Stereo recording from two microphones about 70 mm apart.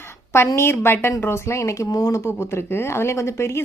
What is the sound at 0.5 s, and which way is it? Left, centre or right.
Speech, left.